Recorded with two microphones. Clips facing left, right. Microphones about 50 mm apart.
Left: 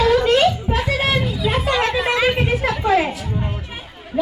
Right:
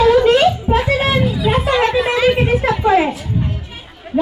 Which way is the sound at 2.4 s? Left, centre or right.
Right.